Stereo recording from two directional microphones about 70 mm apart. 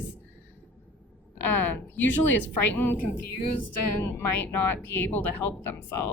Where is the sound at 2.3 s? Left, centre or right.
Left.